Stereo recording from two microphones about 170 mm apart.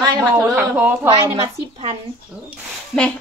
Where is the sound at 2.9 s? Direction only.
Centre (ahead or behind).